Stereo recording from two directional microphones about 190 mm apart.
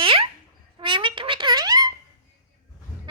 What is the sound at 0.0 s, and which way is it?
Babbling, 25° right (ahead or behind).